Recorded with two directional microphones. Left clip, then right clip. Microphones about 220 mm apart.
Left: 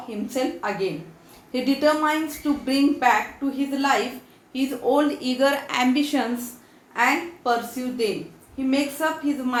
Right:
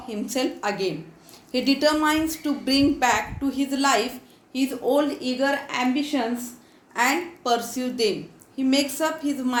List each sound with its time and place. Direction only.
0.3 s a woman's voice: 30° right (ahead or behind)
4.5 s a woman's voice: 20° right (ahead or behind)
6.9 s a woman's voice: 30° right (ahead or behind)